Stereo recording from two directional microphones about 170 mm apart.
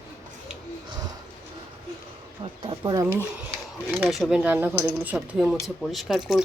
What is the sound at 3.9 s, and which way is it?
Speech, centre (ahead or behind).